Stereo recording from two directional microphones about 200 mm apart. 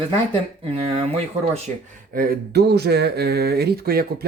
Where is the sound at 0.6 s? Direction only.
30° right (ahead or behind).